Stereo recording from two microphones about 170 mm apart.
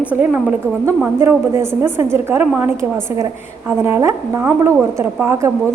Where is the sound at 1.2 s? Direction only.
15° right (ahead or behind).